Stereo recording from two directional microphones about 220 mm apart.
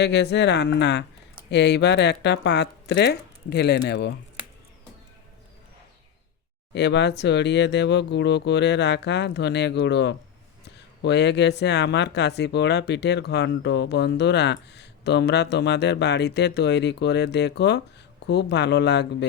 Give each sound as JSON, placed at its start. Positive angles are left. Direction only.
{"t": 0.0, "sound": "speech", "side_deg": 50}
{"t": 6.7, "sound": "speech", "side_deg": 50}